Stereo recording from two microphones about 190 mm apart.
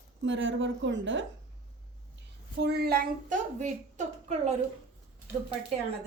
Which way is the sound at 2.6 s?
60° right (ahead or behind).